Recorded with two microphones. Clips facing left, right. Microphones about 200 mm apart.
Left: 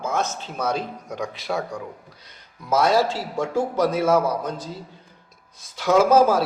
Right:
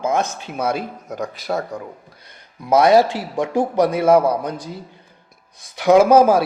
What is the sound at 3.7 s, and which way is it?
Speech, 60° right (ahead or behind).